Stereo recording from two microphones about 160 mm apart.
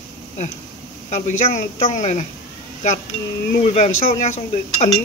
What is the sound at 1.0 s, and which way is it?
Speech, 50° left (ahead or behind).